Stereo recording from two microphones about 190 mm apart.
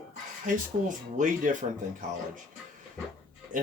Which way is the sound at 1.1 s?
40° right (ahead or behind).